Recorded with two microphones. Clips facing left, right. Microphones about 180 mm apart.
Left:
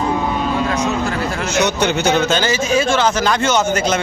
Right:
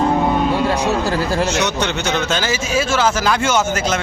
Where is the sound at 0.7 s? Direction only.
35° right (ahead or behind).